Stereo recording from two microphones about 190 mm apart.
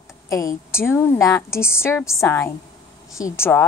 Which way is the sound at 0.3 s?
15° left (ahead or behind).